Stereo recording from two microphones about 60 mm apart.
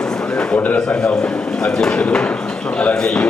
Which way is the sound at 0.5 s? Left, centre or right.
Left.